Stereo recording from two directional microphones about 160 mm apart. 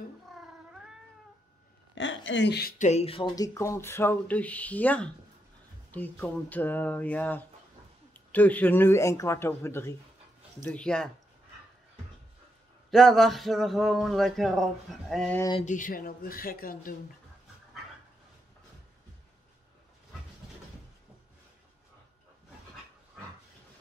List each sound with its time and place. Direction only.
2.4 s speech: 90° left
2.8 s speech: 40° left (ahead or behind)
3.3 s a man's voice: 20° left (ahead or behind)
12.9 s a man's voice: centre (ahead or behind)
15.6 s speech: 55° left (ahead or behind)